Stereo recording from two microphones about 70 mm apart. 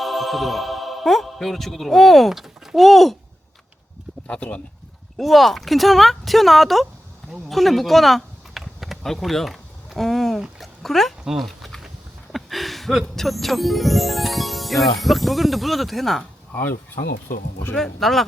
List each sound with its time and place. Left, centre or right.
0.0 s speech: centre
4.3 s speech: centre
5.1 s speech: centre
11.3 s dog: centre
12.3 s a sound: centre
13.1 s speech: centre
16.5 s speech: left
17.7 s speech: centre